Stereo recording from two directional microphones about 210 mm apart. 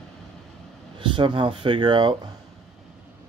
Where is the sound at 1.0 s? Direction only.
25° right (ahead or behind).